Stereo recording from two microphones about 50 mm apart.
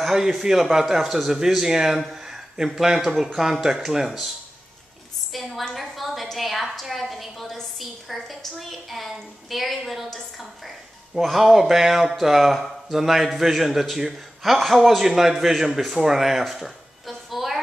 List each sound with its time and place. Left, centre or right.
0.0 s a man's voice: centre
5.6 s a sound: centre
7.8 s speech: centre